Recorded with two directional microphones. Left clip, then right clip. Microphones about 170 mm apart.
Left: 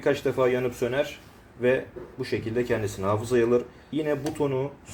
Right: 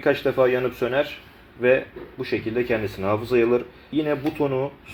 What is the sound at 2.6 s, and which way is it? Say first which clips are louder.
Speech: right 2 dB; 20° right (ahead or behind).